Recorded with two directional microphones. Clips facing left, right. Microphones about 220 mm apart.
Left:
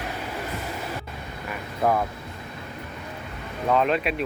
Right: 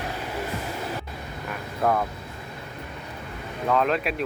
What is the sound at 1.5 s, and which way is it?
Vehicle, 5° left (ahead or behind).